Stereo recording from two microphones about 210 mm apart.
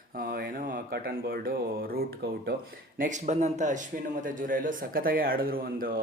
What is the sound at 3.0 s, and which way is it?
Speech, 35° right (ahead or behind).